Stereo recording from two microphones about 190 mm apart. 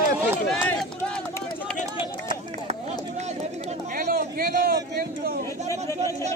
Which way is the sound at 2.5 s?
35° right (ahead or behind).